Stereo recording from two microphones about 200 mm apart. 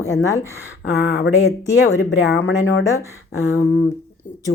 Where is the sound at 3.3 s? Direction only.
90° left.